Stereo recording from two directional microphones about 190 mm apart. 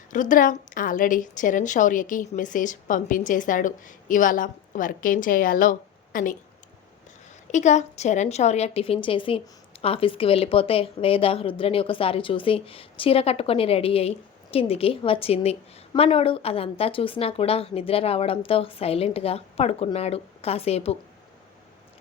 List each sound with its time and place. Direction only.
0.1 s a woman's voice: 45° left (ahead or behind)
7.5 s a woman's voice: 40° left (ahead or behind)